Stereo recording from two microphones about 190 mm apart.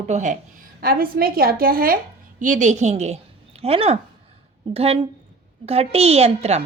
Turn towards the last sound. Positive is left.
turn(degrees=-35)  # may be behind; listen again after turning